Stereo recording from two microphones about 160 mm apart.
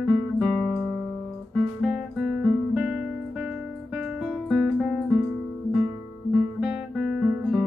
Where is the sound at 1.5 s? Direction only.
Centre (ahead or behind).